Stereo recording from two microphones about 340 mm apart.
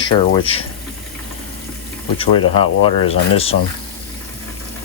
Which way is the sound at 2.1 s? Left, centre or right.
Centre.